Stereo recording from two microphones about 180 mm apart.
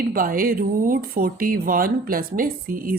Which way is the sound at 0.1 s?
50° right (ahead or behind).